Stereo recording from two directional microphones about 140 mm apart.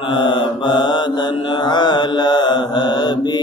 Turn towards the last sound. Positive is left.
turn(degrees=30)  # may be behind; listen again after turning